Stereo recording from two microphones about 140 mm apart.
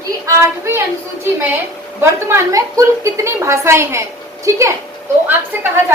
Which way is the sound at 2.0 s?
20° right (ahead or behind).